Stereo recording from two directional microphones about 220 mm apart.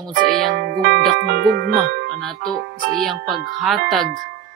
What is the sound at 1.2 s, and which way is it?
Music, 45° right (ahead or behind).